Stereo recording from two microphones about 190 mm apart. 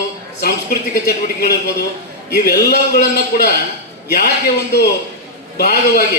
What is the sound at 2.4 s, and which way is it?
Speech, 55° left (ahead or behind).